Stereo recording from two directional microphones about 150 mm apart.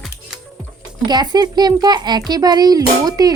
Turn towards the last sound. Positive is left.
turn(degrees=-25)  # may be behind; listen again after turning